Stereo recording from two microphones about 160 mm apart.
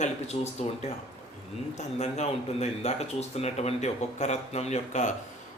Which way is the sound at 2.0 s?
45° left (ahead or behind).